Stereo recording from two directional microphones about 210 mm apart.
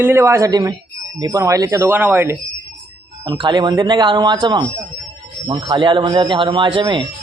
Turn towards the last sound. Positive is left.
turn(degrees=-25)  # may be behind; listen again after turning